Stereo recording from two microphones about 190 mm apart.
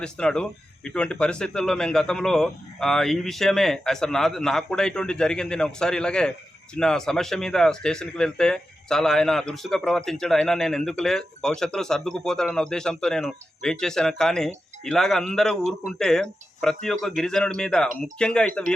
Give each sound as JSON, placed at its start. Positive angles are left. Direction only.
{"t": 0.0, "sound": "speech", "side_deg": 5}